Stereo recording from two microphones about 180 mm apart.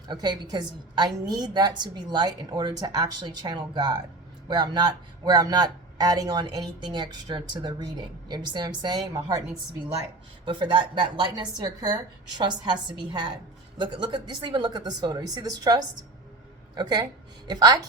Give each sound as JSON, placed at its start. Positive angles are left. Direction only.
{"t": 0.1, "sound": "a woman's voice", "side_deg": -25}
{"t": 10.4, "sound": "a woman's voice", "side_deg": -25}